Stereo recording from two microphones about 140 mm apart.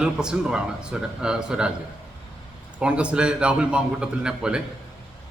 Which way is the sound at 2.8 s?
5° right (ahead or behind).